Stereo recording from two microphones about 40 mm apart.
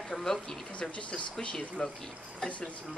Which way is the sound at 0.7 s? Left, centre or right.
Left.